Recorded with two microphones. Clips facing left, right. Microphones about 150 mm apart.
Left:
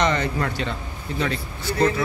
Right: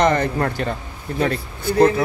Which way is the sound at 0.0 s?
50° right (ahead or behind).